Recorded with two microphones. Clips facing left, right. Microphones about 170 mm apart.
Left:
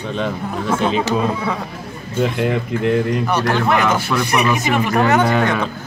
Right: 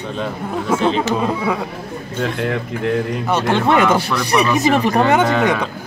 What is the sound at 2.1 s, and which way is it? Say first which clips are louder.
Speech: left 3 dB; 5° left (ahead or behind).